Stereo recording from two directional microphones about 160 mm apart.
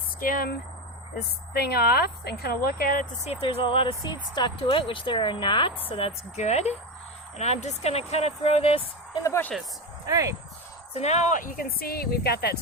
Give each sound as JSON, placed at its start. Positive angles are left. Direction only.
{"t": 0.2, "sound": "speech", "side_deg": 65}
{"t": 1.1, "sound": "speech", "side_deg": 90}
{"t": 3.2, "sound": "speech", "side_deg": 35}
{"t": 9.2, "sound": "speech", "side_deg": 15}
{"t": 10.1, "sound": "speech", "side_deg": -20}
{"t": 10.9, "sound": "speech", "side_deg": 45}